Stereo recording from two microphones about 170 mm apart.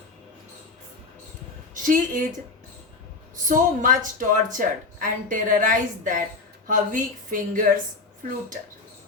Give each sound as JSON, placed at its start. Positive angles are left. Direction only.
{"t": 1.7, "sound": "a woman's voice", "side_deg": -50}
{"t": 3.3, "sound": "speech", "side_deg": -50}